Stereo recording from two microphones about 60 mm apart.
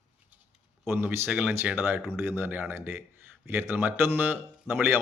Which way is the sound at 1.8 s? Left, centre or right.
Right.